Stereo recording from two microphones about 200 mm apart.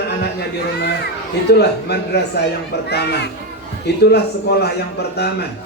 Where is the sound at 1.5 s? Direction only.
55° left (ahead or behind).